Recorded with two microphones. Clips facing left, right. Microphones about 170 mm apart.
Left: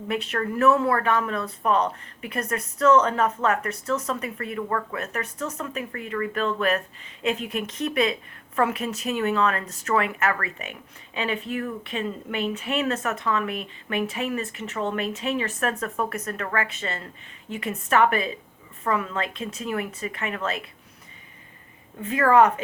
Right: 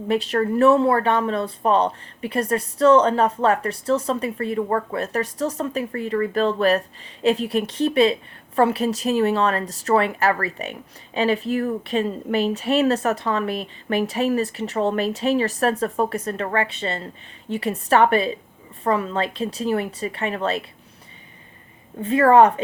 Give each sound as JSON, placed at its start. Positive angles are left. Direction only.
{"t": 0.1, "sound": "a woman's voice", "side_deg": -35}
{"t": 22.0, "sound": "a woman's voice", "side_deg": -35}